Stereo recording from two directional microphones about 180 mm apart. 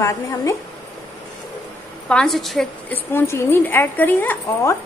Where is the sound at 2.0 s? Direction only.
5° left (ahead or behind).